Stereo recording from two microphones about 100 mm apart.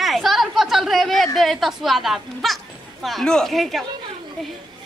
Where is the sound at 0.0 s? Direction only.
Centre (ahead or behind).